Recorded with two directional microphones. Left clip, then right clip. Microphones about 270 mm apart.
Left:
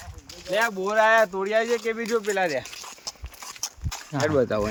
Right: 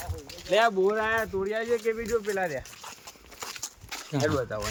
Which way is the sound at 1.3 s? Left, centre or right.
Left.